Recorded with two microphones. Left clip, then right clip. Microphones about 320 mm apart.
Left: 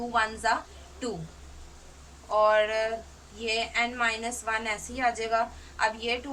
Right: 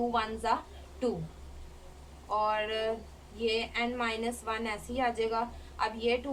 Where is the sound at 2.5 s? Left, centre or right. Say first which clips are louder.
Left 7 dB; centre.